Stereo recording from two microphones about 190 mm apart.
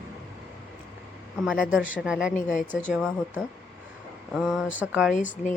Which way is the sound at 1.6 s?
10° right (ahead or behind).